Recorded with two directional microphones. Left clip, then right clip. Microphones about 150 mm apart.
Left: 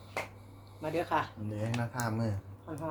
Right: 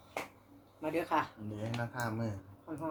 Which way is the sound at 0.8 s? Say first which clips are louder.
Left 1 dB; 10° right (ahead or behind).